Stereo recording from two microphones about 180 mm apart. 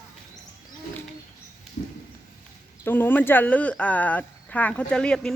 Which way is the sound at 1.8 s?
50° left (ahead or behind).